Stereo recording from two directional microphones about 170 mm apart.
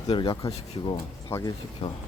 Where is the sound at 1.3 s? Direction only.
15° left (ahead or behind).